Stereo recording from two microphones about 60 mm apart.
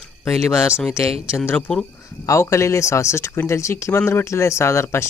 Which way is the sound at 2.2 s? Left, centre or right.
Left.